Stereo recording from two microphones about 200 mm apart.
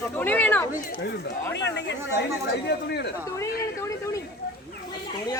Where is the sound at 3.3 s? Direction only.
15° left (ahead or behind).